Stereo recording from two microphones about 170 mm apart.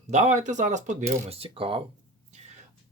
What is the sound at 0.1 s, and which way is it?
Speech, 45° right (ahead or behind).